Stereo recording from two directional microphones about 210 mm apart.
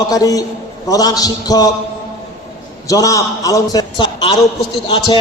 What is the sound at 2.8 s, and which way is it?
A man's voice, 15° left (ahead or behind).